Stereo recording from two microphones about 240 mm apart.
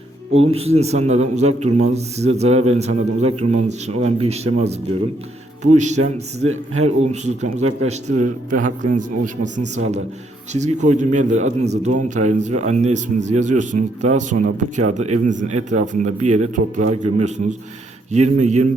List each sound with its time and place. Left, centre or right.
0.4 s a man's voice: right